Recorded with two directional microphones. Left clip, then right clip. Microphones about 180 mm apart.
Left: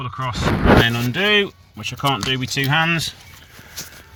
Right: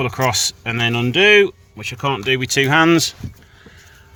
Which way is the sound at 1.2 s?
35° right (ahead or behind).